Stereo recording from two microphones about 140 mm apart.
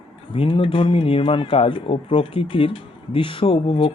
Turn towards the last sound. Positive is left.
turn(degrees=40)  # may be behind; listen again after turning